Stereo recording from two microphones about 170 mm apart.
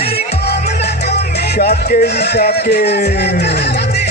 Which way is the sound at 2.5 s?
75° left (ahead or behind).